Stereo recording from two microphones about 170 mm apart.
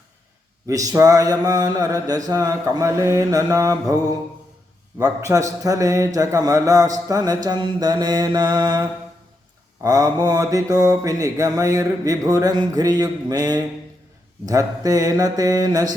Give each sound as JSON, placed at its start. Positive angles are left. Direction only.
{"t": 0.7, "sound": "mantra", "side_deg": -20}
{"t": 4.9, "sound": "mantra", "side_deg": -15}